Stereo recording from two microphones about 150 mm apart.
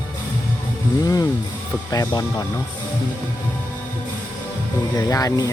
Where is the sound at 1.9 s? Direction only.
25° left (ahead or behind).